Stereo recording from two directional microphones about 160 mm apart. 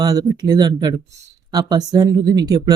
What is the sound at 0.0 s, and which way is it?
Speech, 25° right (ahead or behind).